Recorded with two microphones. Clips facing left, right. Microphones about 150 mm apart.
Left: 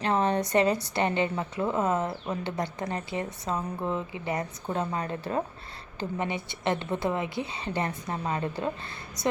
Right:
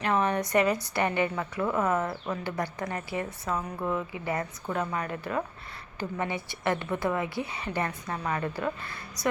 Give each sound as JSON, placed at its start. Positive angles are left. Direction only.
{"t": 0.0, "sound": "a woman's voice", "side_deg": 30}